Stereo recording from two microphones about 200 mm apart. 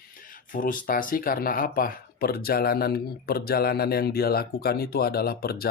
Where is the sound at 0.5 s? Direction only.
45° left (ahead or behind).